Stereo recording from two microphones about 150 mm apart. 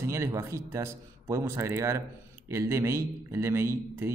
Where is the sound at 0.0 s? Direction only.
20° right (ahead or behind).